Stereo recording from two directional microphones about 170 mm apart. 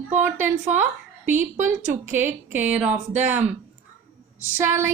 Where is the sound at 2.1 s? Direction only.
10° right (ahead or behind).